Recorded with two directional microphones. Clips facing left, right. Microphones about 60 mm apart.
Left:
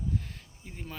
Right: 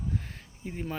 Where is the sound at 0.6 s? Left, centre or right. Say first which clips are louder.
Right 10 dB; right.